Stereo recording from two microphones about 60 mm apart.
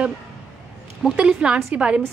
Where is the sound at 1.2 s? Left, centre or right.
Centre.